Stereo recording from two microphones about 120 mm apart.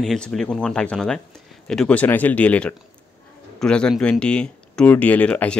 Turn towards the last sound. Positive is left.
turn(degrees=10)  # may be behind; listen again after turning